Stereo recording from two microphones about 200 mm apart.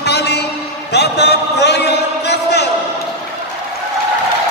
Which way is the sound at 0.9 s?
55° left (ahead or behind).